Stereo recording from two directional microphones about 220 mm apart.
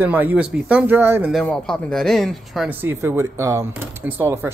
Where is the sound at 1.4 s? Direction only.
Centre (ahead or behind).